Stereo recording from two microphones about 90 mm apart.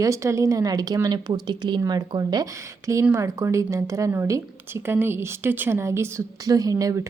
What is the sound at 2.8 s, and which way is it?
Speech, 35° right (ahead or behind).